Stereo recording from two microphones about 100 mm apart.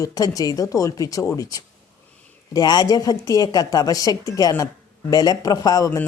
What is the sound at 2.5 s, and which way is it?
Speech, 40° left (ahead or behind).